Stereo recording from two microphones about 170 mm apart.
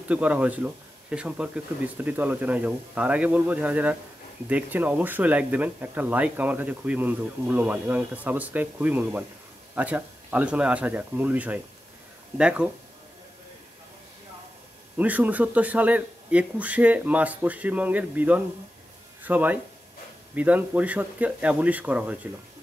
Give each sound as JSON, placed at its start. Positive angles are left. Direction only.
{"t": 0.1, "sound": "speech", "side_deg": -10}
{"t": 15.0, "sound": "speech", "side_deg": -10}